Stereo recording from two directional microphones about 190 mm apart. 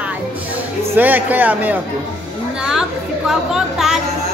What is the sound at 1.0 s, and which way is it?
A man's voice, 10° right (ahead or behind).